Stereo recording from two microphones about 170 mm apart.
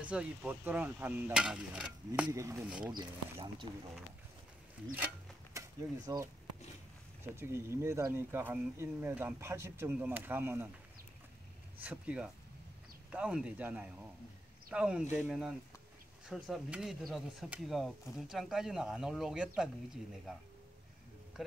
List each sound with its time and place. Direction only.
0.0 s speech: 5° right (ahead or behind)
2.2 s speech: 20° right (ahead or behind)
4.9 s a sound: 15° right (ahead or behind)
7.3 s speech: 15° right (ahead or behind)
11.8 s speech: 5° right (ahead or behind)
21.4 s speech: 5° right (ahead or behind)